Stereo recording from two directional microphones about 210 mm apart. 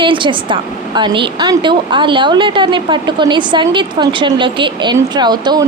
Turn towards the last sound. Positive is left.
turn(degrees=-20)  # may be behind; listen again after turning